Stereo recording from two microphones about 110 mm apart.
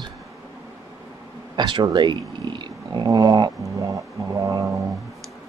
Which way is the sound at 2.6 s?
40° right (ahead or behind).